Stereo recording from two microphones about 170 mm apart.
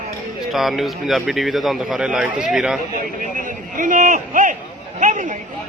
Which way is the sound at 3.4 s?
50° right (ahead or behind).